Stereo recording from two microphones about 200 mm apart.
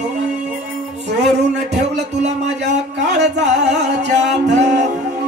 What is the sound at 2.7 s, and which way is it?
Music, 60° right (ahead or behind).